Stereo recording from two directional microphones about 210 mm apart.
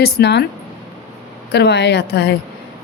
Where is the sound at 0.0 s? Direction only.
55° left (ahead or behind).